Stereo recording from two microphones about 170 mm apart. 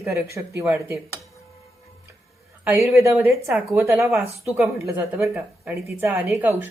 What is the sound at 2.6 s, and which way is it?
A woman's voice, 10° right (ahead or behind).